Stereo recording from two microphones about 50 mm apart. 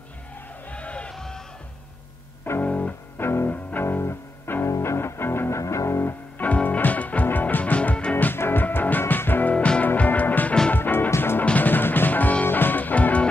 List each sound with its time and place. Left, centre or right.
0.7 s music: left
1.1 s music: centre
2.6 s music: left
3.2 s music: left
5.6 s music: left
6.3 s music: left
8.4 s music: left
9.5 s music: left
11.5 s music: left